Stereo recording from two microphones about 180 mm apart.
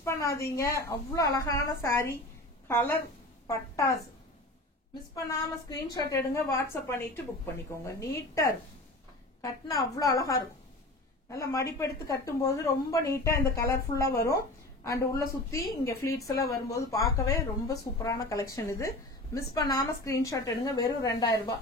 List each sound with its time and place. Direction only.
0.0 s a woman's voice: 15° left (ahead or behind)
5.4 s a woman's voice: 20° left (ahead or behind)